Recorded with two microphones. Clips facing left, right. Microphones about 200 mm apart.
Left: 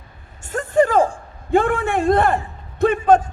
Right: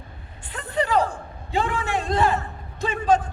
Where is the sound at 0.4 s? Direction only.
45° left (ahead or behind).